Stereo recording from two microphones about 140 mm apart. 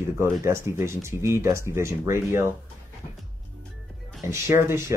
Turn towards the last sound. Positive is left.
turn(degrees=-20)  # may be behind; listen again after turning